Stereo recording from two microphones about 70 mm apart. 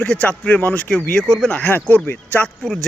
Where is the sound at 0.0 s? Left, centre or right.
Left.